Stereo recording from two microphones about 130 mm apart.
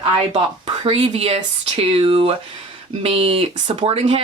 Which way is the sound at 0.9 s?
45° right (ahead or behind).